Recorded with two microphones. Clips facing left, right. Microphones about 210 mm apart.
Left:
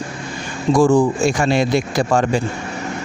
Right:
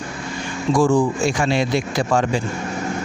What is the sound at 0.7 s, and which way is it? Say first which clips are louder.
Speech: left 3 dB; 40° left (ahead or behind).